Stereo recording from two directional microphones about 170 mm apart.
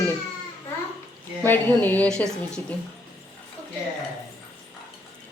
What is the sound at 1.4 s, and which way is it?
Speech, 10° left (ahead or behind).